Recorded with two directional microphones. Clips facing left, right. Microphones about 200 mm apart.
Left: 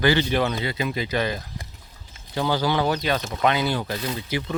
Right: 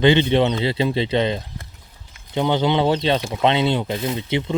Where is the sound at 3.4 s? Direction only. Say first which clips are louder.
Right 4 dB; 25° right (ahead or behind).